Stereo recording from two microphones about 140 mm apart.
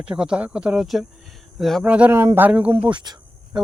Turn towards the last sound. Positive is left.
turn(degrees=-30)  # may be behind; listen again after turning